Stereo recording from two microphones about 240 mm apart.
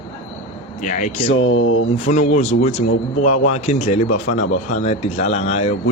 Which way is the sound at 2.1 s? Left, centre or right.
Left.